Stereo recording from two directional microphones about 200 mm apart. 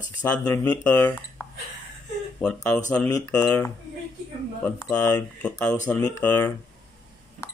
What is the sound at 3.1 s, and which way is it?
Speech, 15° left (ahead or behind).